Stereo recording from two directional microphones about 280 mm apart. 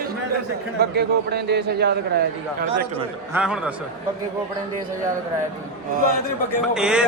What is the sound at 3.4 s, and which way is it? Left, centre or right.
Speech, centre.